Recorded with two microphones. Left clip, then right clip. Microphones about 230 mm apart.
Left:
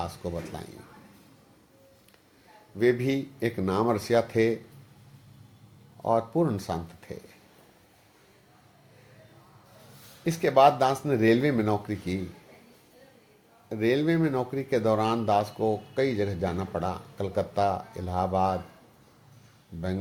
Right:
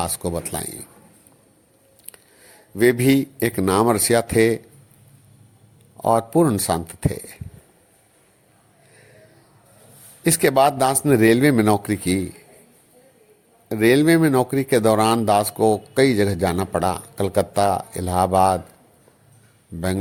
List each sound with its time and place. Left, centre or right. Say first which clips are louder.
0.0 s a man's voice: right 8 dB; right
2.7 s a man's voice: right 8 dB; right
6.0 s a man's voice: right 8 dB; right
10.2 s a man's voice: right 4 dB; right
13.7 s a man's voice: right 10 dB; right